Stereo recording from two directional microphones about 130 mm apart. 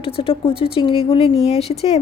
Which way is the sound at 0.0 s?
45° left (ahead or behind).